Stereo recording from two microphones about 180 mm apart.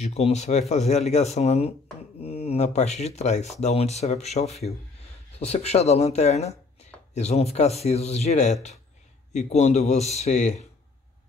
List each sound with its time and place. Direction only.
0.0 s speech: 35° left (ahead or behind)